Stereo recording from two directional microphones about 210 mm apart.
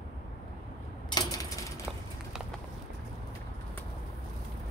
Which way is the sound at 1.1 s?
15° left (ahead or behind).